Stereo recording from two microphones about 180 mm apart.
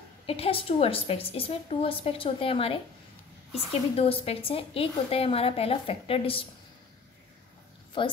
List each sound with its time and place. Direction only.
0.3 s a woman's voice: 30° left (ahead or behind)
3.9 s a woman's voice: 35° left (ahead or behind)
8.0 s a woman's voice: 30° left (ahead or behind)